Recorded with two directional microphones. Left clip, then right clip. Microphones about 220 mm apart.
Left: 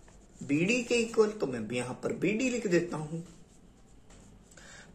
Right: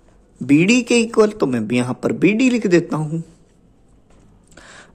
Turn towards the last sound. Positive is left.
turn(degrees=-55)  # may be behind; listen again after turning